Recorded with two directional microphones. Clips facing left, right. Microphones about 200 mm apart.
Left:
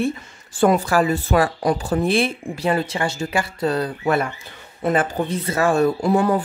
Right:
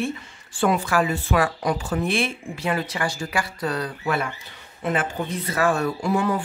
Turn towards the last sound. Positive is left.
turn(degrees=35)  # may be behind; listen again after turning